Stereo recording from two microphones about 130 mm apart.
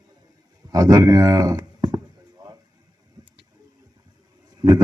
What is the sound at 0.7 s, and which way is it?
Speech, 30° right (ahead or behind).